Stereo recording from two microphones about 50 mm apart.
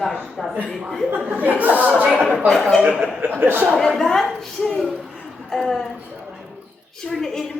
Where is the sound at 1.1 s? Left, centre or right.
Right.